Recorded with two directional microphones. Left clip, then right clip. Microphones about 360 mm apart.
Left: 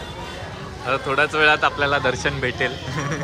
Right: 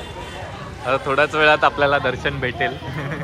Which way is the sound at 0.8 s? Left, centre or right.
Centre.